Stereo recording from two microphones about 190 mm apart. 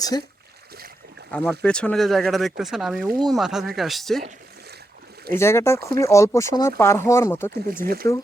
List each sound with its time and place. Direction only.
1.3 s speech: 5° left (ahead or behind)
5.3 s speech: 15° left (ahead or behind)
7.8 s speech: 50° right (ahead or behind)